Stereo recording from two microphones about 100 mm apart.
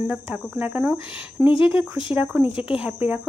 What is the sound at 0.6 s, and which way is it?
Speech, 15° right (ahead or behind).